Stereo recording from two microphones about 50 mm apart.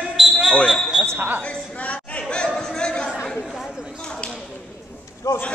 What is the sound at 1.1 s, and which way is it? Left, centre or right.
Speech, right.